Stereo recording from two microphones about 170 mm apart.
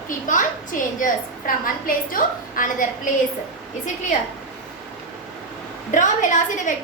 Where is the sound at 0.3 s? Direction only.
50° left (ahead or behind).